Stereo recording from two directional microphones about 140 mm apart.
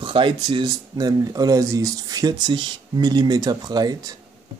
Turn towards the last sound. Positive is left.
turn(degrees=-30)  # may be behind; listen again after turning